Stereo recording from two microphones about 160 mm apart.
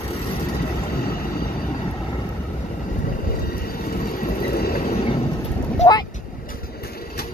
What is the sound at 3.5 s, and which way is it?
Train, 65° left (ahead or behind).